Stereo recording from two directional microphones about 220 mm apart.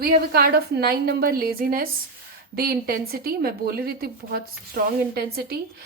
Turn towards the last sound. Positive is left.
turn(degrees=-45)  # may be behind; listen again after turning